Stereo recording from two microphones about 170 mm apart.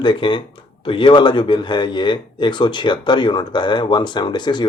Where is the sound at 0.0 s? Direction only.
30° left (ahead or behind).